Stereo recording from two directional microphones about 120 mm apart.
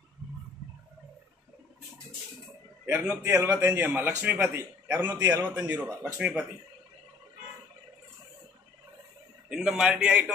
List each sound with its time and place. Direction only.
2.8 s a man's voice: 15° right (ahead or behind)
3.2 s a man's voice: 25° right (ahead or behind)
3.5 s a man's voice: 15° right (ahead or behind)
5.1 s a man's voice: 30° right (ahead or behind)
5.6 s speech: 10° right (ahead or behind)
9.5 s a man's voice: 5° right (ahead or behind)